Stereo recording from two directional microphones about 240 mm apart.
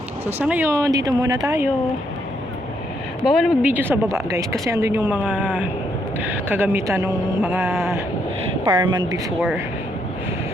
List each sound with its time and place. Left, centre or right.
0.3 s speech: centre
3.2 s speech: centre
8.7 s a woman's voice: centre